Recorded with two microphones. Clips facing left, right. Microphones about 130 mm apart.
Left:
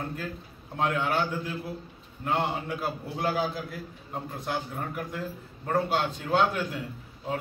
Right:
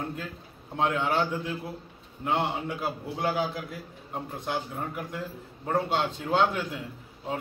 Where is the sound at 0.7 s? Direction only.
20° right (ahead or behind).